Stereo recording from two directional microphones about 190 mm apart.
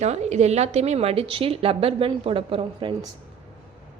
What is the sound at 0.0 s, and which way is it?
A woman's voice, 35° right (ahead or behind).